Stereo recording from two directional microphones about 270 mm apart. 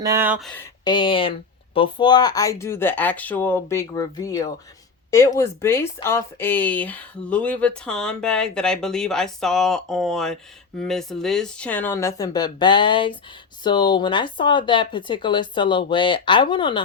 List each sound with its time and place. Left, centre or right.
0.0 s speech: centre